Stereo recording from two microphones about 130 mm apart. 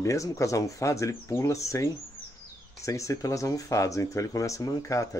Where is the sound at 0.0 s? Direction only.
25° left (ahead or behind).